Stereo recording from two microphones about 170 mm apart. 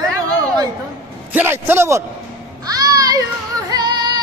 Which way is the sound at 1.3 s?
15° right (ahead or behind).